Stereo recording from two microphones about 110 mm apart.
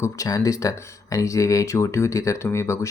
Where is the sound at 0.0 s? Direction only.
30° left (ahead or behind).